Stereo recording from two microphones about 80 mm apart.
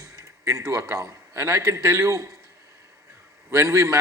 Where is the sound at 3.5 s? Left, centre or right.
Right.